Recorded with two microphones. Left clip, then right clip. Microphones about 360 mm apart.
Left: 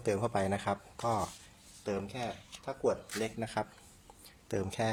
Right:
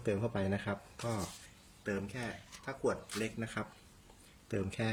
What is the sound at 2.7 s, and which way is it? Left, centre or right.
Speech, centre.